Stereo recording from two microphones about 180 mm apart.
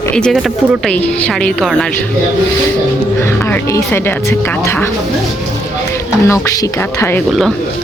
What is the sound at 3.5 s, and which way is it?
Speech, 10° left (ahead or behind).